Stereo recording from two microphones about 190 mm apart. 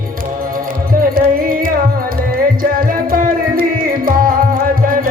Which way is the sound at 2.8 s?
50° right (ahead or behind).